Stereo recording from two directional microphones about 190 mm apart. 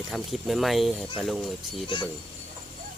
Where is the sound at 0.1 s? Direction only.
Centre (ahead or behind).